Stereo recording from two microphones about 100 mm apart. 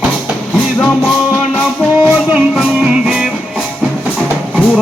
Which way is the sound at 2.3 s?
10° right (ahead or behind).